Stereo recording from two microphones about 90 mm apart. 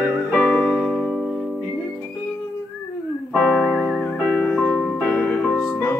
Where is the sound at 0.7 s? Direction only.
5° right (ahead or behind).